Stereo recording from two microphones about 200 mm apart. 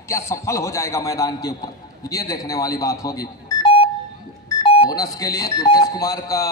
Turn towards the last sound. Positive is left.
turn(degrees=15)  # may be behind; listen again after turning